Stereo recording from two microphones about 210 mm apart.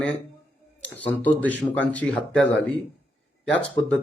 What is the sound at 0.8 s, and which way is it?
Speech, 5° left (ahead or behind).